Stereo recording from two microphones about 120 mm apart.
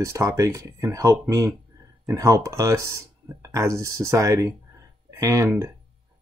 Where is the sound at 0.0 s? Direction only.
25° right (ahead or behind).